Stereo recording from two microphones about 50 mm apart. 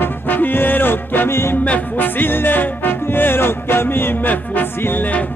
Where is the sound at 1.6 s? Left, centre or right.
Left.